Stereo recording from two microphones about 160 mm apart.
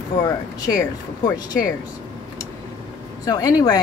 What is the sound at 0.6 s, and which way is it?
A woman's voice, 25° left (ahead or behind).